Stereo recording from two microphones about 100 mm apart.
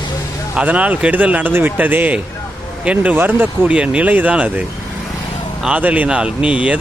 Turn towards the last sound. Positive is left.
turn(degrees=-10)  # may be behind; listen again after turning